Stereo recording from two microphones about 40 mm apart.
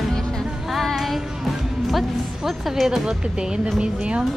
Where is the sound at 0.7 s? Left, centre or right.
Centre.